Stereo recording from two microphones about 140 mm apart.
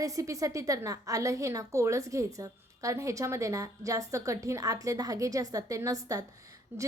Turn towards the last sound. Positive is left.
turn(degrees=-15)  # may be behind; listen again after turning